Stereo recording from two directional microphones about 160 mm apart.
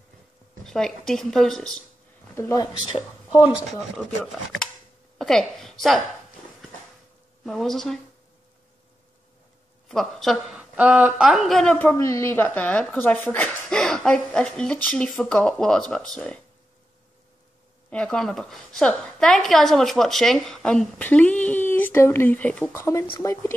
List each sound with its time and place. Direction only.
0.7 s a woman's voice: 5° left (ahead or behind)
2.3 s speech: 20° left (ahead or behind)
3.3 s speech: 35° left (ahead or behind)
5.2 s a woman's voice: centre (ahead or behind)
7.4 s a woman's voice: centre (ahead or behind)
9.8 s a woman's voice: centre (ahead or behind)
17.8 s a woman's voice: 5° left (ahead or behind)